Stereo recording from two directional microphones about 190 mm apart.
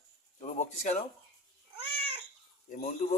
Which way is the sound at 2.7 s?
40° left (ahead or behind).